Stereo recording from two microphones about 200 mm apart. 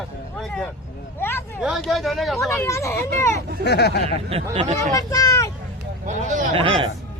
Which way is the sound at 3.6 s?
55° left (ahead or behind).